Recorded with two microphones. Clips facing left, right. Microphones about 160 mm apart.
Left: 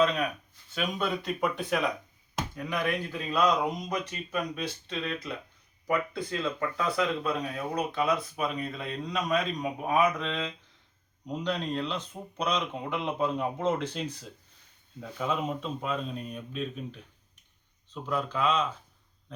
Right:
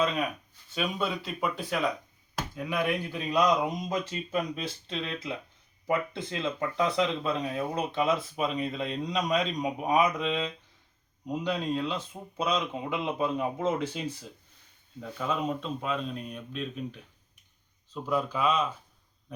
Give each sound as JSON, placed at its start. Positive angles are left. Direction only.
{"t": 0.7, "sound": "speech", "side_deg": 0}
{"t": 3.8, "sound": "speech", "side_deg": -25}
{"t": 15.0, "sound": "speech", "side_deg": 5}